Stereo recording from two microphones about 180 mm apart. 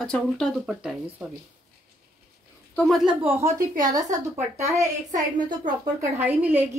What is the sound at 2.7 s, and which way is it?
Speech, 5° left (ahead or behind).